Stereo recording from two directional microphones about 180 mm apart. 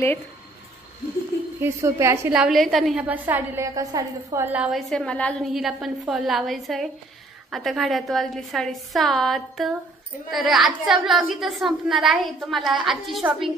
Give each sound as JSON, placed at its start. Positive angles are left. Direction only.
{"t": 1.6, "sound": "a woman's voice", "side_deg": -15}
{"t": 2.3, "sound": "a woman's voice", "side_deg": 0}